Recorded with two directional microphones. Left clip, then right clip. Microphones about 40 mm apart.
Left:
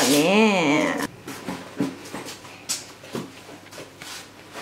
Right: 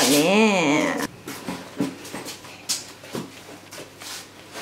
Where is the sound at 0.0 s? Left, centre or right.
Centre.